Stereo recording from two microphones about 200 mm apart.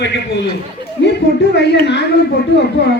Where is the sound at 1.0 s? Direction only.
65° left (ahead or behind).